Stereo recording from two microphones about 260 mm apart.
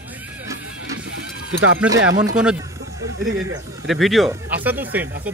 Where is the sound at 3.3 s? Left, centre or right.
Right.